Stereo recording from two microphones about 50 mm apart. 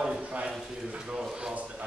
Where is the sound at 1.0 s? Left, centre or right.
Centre.